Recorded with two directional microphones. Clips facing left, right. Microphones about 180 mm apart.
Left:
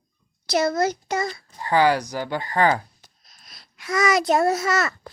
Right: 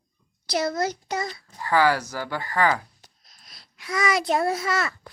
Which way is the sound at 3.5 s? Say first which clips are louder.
Left 4 dB; 50° left (ahead or behind).